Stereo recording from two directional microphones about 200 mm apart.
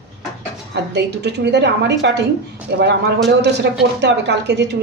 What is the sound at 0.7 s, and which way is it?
Speech, 55° right (ahead or behind).